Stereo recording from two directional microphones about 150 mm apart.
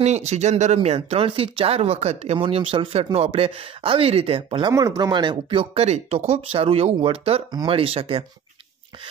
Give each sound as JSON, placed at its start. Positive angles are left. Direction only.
{"t": 0.0, "sound": "speech", "side_deg": -50}